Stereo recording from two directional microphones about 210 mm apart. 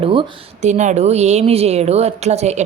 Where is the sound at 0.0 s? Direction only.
25° right (ahead or behind).